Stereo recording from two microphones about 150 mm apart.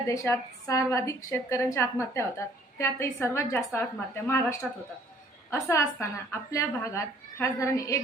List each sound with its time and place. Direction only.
0.1 s a woman's voice: 20° left (ahead or behind)